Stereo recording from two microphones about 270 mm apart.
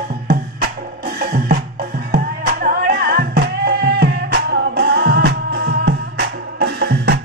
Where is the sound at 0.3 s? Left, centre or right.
Right.